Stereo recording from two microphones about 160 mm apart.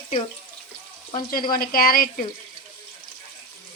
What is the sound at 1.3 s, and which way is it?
Speech, 65° left (ahead or behind).